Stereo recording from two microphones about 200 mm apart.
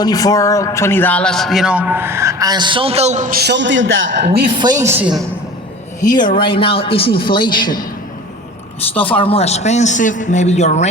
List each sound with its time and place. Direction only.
0.0 s a man's voice: 20° left (ahead or behind); by 4.4 s 60° right (ahead or behind)
4.5 s a man's voice: 20° right (ahead or behind)
6.1 s a man's voice: 20° left (ahead or behind)
9.1 s a man's voice: 30° left (ahead or behind)